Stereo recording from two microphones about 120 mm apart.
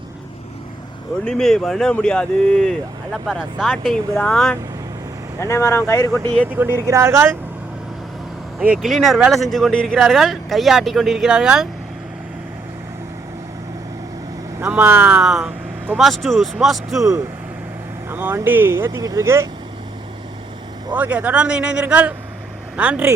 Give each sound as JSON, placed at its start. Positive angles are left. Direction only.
{"t": 1.2, "sound": "speech", "side_deg": 5}
{"t": 2.6, "sound": "speech", "side_deg": 0}
{"t": 5.4, "sound": "speech", "side_deg": 20}
{"t": 6.4, "sound": "speech", "side_deg": -15}
{"t": 8.8, "sound": "speech", "side_deg": 0}
{"t": 14.6, "sound": "speech", "side_deg": -15}
{"t": 17.0, "sound": "speech", "side_deg": -25}
{"t": 20.9, "sound": "a man's voice", "side_deg": -10}